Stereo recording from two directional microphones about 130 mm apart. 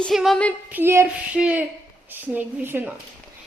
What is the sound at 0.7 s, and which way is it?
Speech, 15° right (ahead or behind).